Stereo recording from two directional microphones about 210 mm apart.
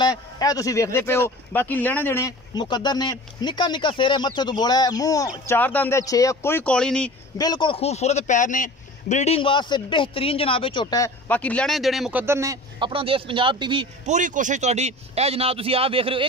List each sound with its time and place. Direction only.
0.0 s speech: 20° left (ahead or behind)
7.3 s a man's voice: 20° left (ahead or behind)
11.2 s speech: 5° left (ahead or behind); by 13.8 s 25° right (ahead or behind)
14.0 s speech: 35° right (ahead or behind)